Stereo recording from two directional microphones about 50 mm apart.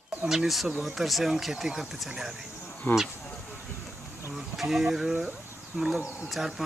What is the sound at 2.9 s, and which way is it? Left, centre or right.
Speech, left.